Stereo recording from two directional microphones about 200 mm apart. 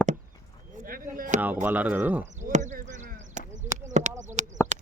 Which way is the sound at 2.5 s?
35° right (ahead or behind).